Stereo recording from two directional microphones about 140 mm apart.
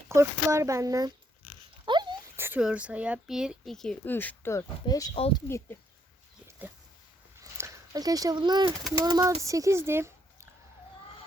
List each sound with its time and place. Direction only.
0.1 s speech: 20° right (ahead or behind)
1.8 s dog: 35° right (ahead or behind)
2.3 s a sound: 15° right (ahead or behind)
2.6 s speech: 5° right (ahead or behind); by 5.1 s 25° left (ahead or behind)
5.1 s speech: 40° left (ahead or behind)
5.5 s speech: 20° left (ahead or behind)
7.6 s speech: 25° right (ahead or behind)